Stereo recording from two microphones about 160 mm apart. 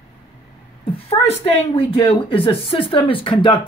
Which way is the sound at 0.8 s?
40° left (ahead or behind).